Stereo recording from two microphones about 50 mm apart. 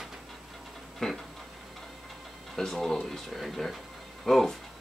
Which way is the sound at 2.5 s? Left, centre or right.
Centre.